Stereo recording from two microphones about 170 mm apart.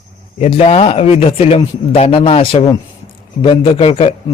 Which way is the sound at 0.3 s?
40° left (ahead or behind).